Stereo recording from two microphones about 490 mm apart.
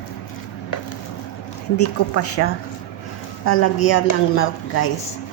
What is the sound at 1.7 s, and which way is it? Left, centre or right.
A woman's voice, left.